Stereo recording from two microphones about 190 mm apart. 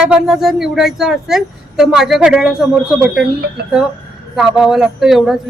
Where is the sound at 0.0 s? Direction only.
5° right (ahead or behind).